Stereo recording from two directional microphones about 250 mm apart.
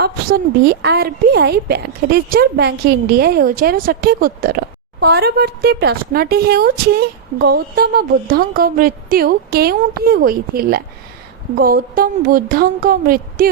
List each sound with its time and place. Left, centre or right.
0.0 s a woman's voice: right